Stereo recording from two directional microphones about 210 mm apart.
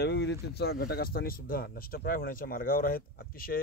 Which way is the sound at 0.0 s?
55° left (ahead or behind).